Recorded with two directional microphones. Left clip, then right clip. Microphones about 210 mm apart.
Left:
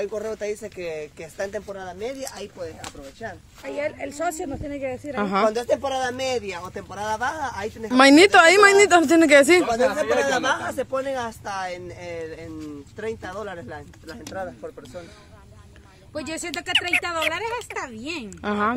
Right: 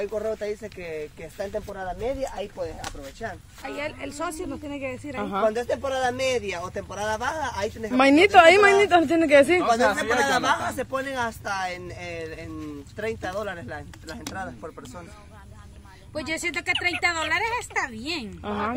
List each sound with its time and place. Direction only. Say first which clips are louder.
0.0 s speech: even; 40° left (ahead or behind)
1.7 s speech: right 2 dB; 30° left (ahead or behind)
2.8 s speech: right 1 dB; centre (ahead or behind)
5.1 s speech: left 3 dB; 35° left (ahead or behind)
5.5 s speech: left 3 dB; 50° left (ahead or behind)
5.9 s speech: even; 30° left (ahead or behind); by 7.9 s centre (ahead or behind)
7.9 s speech: left 3 dB; 25° left (ahead or behind)
9.9 s speech: left 1 dB; 15° right (ahead or behind)
14.2 s speech: left 3 dB; 35° right (ahead or behind)
16.2 s speech: right 2 dB; 5° left (ahead or behind)